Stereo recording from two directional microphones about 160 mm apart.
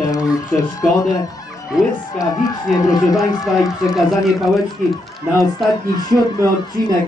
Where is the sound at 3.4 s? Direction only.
Centre (ahead or behind).